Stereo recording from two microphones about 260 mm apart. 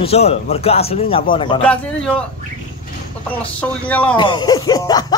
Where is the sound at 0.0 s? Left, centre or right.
Left.